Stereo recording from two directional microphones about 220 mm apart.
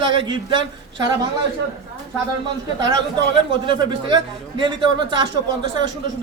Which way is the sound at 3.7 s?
20° right (ahead or behind).